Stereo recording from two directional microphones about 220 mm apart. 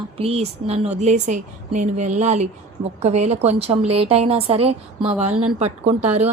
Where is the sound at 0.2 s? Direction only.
25° right (ahead or behind).